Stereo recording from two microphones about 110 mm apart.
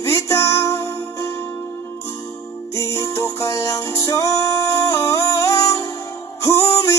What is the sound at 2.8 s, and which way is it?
Music, 25° left (ahead or behind).